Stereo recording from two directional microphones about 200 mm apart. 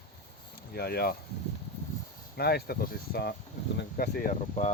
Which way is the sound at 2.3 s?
50° left (ahead or behind).